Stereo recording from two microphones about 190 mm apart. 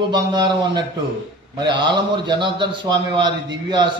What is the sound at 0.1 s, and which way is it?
A man's voice, 20° right (ahead or behind).